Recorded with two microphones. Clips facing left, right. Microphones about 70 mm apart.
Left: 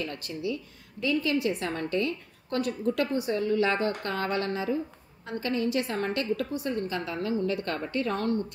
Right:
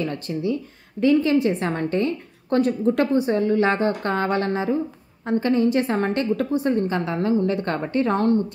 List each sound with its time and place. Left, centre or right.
0.1 s a woman's voice: right